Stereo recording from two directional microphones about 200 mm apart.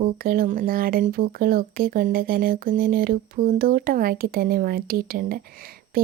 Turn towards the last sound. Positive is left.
turn(degrees=-50)  # may be behind; listen again after turning